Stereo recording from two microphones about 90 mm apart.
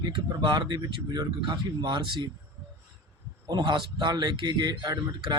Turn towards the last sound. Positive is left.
turn(degrees=-60)  # may be behind; listen again after turning